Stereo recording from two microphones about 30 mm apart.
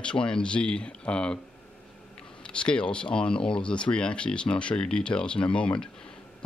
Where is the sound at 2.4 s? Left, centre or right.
Left.